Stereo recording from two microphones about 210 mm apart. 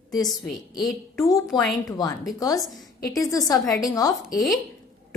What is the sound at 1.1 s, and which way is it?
Speech, 15° left (ahead or behind).